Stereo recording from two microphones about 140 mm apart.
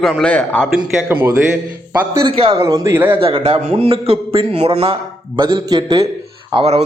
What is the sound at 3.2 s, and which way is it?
A man's voice, 40° right (ahead or behind).